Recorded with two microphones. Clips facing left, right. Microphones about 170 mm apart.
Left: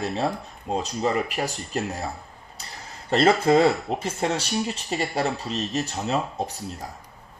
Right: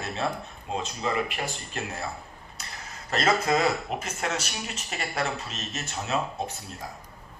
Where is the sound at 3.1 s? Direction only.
30° left (ahead or behind).